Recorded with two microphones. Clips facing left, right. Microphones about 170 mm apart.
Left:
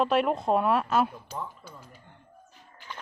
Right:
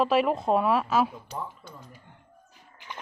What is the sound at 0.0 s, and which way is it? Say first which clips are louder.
Speech: right 1 dB; centre (ahead or behind).